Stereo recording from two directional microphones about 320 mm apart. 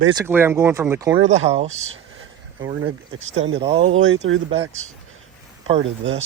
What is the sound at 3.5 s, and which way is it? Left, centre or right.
Speech, centre.